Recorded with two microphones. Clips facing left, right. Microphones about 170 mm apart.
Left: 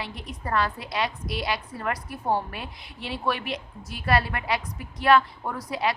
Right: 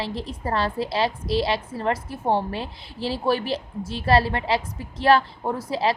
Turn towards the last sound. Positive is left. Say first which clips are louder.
# right 4 dB
turn(degrees=-30)  # may be behind; listen again after turning